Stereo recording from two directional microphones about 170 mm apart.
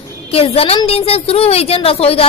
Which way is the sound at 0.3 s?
35° left (ahead or behind).